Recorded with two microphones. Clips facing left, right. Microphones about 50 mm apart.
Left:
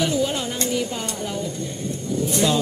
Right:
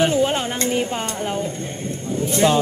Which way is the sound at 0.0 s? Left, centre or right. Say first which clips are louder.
Right 4 dB; right.